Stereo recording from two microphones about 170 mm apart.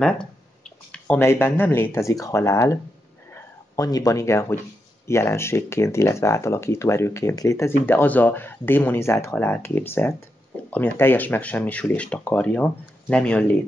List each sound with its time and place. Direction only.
0.0 s speech: 5° left (ahead or behind)